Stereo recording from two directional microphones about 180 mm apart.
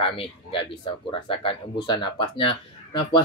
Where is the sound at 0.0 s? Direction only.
30° left (ahead or behind).